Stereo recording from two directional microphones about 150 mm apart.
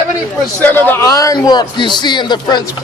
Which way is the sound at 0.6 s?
10° left (ahead or behind).